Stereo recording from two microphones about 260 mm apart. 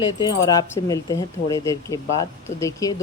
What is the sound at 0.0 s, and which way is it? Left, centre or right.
Speech, centre.